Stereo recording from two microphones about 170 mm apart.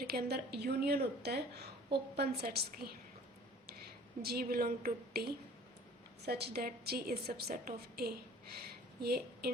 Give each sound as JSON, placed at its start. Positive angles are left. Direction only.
{"t": 0.0, "sound": "a woman's voice", "side_deg": -65}
{"t": 4.2, "sound": "a woman's voice", "side_deg": -65}